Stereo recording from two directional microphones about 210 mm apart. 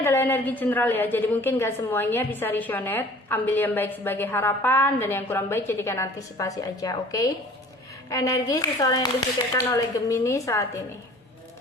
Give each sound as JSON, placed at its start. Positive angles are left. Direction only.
{"t": 0.0, "sound": "a woman's voice", "side_deg": 10}